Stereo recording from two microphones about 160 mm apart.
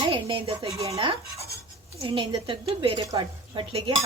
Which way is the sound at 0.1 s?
35° right (ahead or behind).